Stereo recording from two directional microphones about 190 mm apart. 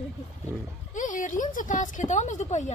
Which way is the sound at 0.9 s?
40° left (ahead or behind).